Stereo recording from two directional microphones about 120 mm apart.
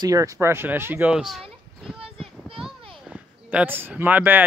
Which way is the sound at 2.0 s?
50° right (ahead or behind).